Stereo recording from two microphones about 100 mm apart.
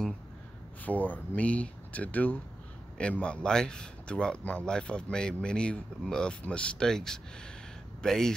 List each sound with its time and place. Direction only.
0.8 s speech: 15° left (ahead or behind)